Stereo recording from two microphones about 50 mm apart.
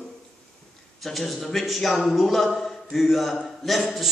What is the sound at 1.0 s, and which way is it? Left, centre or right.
Speech, centre.